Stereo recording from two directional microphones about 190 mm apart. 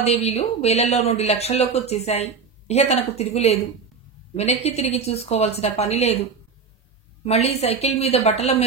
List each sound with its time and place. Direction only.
0.0 s speech: 35° left (ahead or behind)
7.2 s speech: 35° left (ahead or behind)